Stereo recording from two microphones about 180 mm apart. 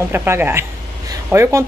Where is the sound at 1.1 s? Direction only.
15° right (ahead or behind).